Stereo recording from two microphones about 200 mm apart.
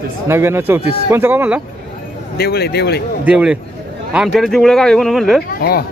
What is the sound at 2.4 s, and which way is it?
Speech, 55° left (ahead or behind).